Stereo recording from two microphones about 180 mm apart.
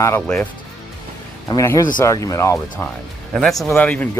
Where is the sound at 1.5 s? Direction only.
15° left (ahead or behind).